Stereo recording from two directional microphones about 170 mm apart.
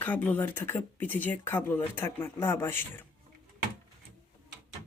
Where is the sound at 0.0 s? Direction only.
10° left (ahead or behind).